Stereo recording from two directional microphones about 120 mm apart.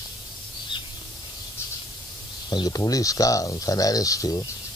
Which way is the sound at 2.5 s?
35° left (ahead or behind).